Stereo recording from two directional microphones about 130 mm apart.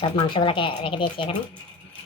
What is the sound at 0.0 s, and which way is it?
Speech, 40° left (ahead or behind).